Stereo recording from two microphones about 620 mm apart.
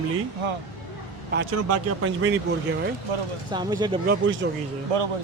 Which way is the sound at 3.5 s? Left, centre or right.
Centre.